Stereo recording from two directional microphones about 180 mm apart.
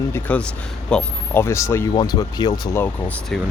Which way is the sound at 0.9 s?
10° left (ahead or behind).